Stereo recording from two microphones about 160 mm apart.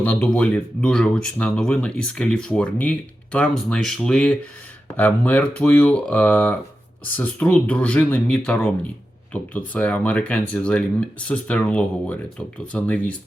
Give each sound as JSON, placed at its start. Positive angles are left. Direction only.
{"t": 0.0, "sound": "speech", "side_deg": 10}